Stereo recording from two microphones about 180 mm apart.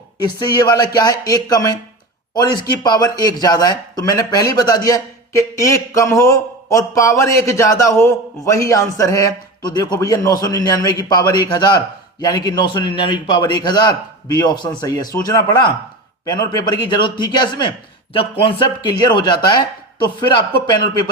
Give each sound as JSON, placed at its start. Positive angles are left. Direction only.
{"t": 0.3, "sound": "a man's voice", "side_deg": 20}